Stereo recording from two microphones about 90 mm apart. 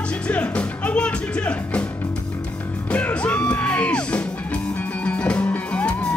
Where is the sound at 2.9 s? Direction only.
15° left (ahead or behind).